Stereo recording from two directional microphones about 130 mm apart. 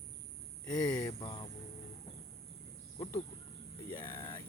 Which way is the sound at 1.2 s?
35° left (ahead or behind).